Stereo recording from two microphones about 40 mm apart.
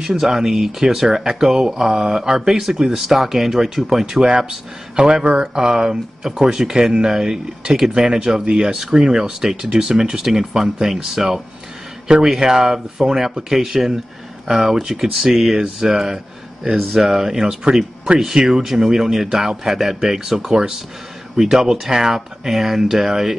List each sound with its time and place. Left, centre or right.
0.0 s speech: centre
5.0 s speech: right
18.2 s speech: centre